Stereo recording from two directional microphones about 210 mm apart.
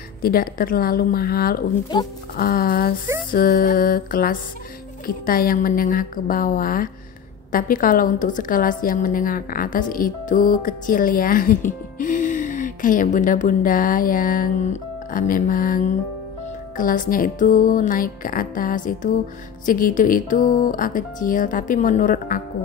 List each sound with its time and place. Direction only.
0.2 s a woman's voice: 45° left (ahead or behind)